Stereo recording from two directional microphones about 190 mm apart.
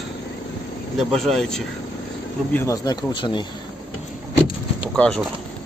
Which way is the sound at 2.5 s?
15° left (ahead or behind).